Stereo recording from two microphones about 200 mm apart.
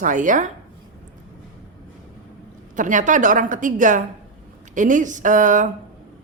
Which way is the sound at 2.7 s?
40° right (ahead or behind).